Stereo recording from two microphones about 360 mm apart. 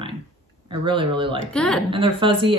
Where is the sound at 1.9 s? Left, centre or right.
Centre.